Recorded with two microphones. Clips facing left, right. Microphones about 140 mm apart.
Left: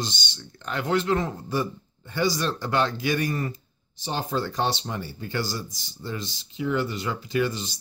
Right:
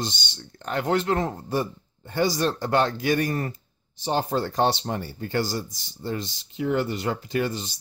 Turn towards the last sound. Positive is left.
turn(degrees=-45)  # may be behind; listen again after turning